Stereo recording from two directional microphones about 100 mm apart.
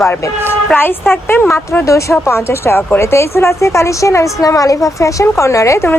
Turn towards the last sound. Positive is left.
turn(degrees=30)  # may be behind; listen again after turning